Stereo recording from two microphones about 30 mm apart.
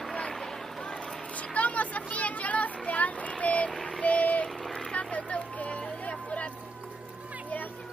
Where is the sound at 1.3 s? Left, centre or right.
Left.